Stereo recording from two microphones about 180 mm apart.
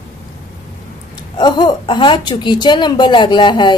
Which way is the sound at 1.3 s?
25° left (ahead or behind).